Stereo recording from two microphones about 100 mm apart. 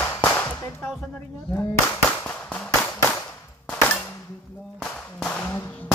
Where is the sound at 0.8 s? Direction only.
5° left (ahead or behind).